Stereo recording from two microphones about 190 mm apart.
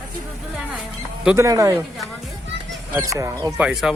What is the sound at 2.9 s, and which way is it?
Speech, 15° right (ahead or behind).